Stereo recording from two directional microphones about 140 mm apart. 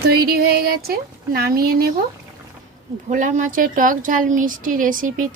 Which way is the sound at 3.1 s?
70° right (ahead or behind).